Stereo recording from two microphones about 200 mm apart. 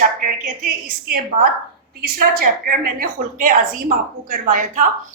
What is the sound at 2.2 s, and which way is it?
A woman's voice, 45° right (ahead or behind).